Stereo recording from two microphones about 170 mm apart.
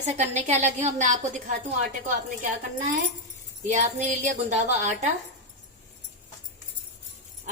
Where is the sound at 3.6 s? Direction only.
45° right (ahead or behind).